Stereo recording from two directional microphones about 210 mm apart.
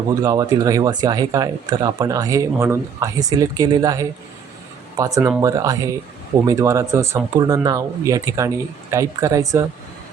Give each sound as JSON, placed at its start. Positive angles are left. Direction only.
{"t": 0.2, "sound": "speech", "side_deg": -15}